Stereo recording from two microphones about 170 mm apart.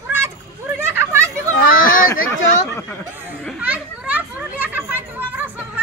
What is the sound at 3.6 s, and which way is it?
Children playing, 10° right (ahead or behind).